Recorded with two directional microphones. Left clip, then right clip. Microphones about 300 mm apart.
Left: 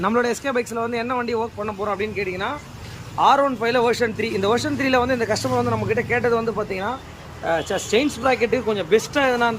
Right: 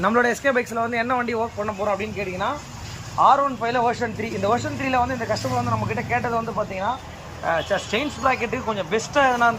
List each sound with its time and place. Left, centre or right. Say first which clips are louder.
0.0 s speech: right 2 dB; centre
3.2 s speech: even; centre